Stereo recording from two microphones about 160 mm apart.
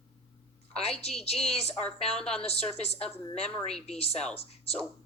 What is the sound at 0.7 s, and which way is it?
A woman's voice, 40° left (ahead or behind).